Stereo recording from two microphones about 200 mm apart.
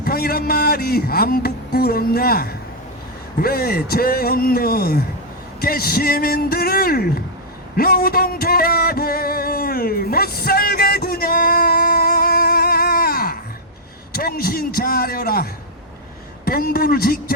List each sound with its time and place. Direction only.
0.0 s a man's voice: 50° left (ahead or behind)
7.8 s music: 50° left (ahead or behind)
14.1 s a man's voice: 50° left (ahead or behind)
16.5 s speech: 50° left (ahead or behind)